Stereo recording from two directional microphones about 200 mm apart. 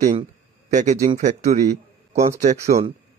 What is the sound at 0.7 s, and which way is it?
A man's voice, 35° right (ahead or behind).